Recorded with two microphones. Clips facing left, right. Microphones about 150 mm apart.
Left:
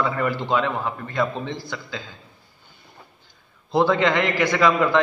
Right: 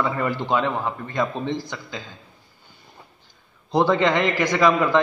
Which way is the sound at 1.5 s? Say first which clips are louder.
Right 1 dB; 15° right (ahead or behind).